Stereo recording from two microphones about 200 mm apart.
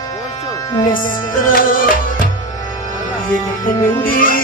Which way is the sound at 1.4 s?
45° left (ahead or behind).